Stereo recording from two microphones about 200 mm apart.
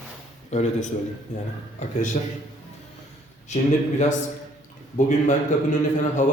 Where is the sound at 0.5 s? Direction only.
35° left (ahead or behind).